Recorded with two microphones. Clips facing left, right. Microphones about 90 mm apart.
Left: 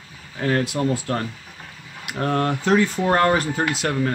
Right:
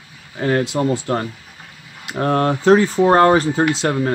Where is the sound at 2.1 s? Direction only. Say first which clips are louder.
Right 4 dB; 40° right (ahead or behind).